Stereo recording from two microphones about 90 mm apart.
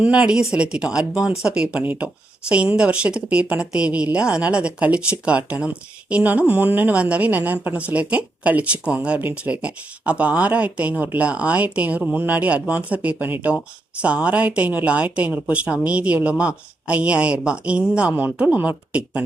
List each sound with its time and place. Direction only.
0.0 s speech: 10° right (ahead or behind)
1.8 s speech: 20° right (ahead or behind)
2.5 s speech: 10° right (ahead or behind)